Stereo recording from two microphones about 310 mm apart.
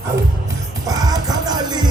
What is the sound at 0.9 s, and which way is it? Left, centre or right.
Music, centre.